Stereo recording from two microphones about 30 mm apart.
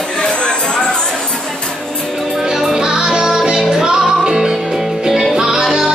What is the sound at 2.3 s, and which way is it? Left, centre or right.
Music, centre.